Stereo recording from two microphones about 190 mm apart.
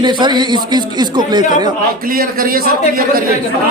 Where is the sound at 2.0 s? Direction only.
50° right (ahead or behind).